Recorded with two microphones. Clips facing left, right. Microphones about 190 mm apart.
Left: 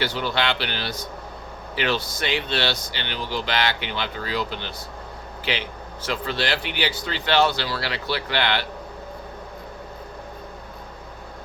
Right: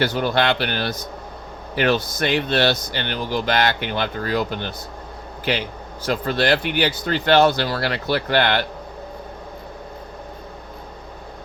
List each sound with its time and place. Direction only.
0.0 s speech: 50° right (ahead or behind)
6.1 s speech: 50° right (ahead or behind)